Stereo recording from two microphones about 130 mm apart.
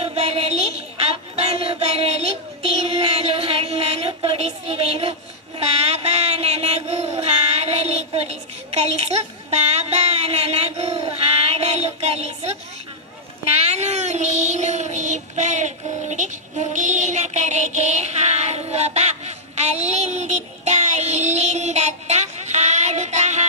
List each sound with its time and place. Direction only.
0.0 s music: 50° right (ahead or behind)
5.5 s child singing: 50° right (ahead or behind)
13.6 s child singing: 55° right (ahead or behind)